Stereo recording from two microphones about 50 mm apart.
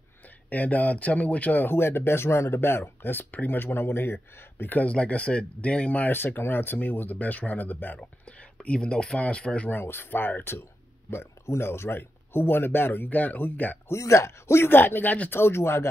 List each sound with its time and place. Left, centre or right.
0.5 s speech: left
1.7 s speech: left
2.8 s speech: left
4.8 s speech: left
6.1 s speech: left
8.0 s a sound: left
8.6 s speech: left
9.7 s speech: left
13.8 s speech: left
15.3 s speech: left